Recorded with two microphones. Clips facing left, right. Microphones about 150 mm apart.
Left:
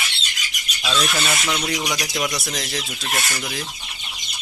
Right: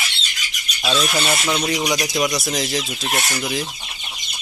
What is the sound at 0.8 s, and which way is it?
Speech, 25° right (ahead or behind).